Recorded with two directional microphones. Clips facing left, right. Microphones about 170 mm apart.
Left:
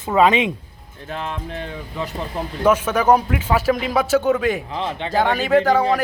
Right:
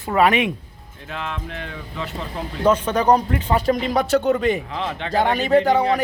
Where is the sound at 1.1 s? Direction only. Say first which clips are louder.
Left 2 dB; 40° left (ahead or behind).